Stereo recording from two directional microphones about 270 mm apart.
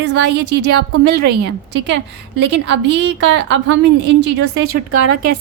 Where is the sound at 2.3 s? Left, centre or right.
Right.